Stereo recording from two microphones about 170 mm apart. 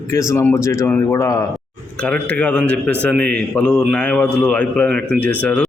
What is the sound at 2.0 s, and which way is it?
Speech, 10° left (ahead or behind).